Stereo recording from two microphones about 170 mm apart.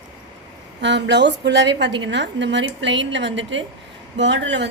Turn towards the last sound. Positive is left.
turn(degrees=-90)